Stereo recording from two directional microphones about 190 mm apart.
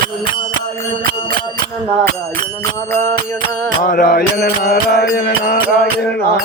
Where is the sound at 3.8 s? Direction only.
45° left (ahead or behind).